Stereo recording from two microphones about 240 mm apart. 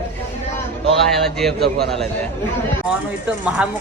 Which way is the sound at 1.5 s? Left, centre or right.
Right.